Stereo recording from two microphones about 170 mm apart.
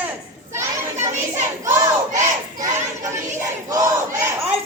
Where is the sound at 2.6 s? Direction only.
20° right (ahead or behind).